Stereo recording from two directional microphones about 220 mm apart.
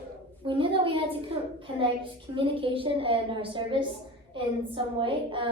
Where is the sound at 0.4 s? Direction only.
20° right (ahead or behind).